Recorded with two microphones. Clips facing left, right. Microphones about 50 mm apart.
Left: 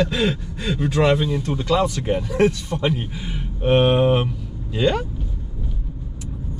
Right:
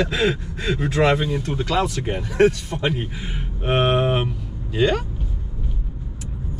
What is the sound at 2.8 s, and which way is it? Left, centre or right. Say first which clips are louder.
Speech: even; right.